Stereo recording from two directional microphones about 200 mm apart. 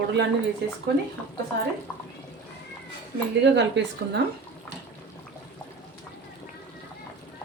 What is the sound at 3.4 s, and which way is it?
Speech, 60° right (ahead or behind).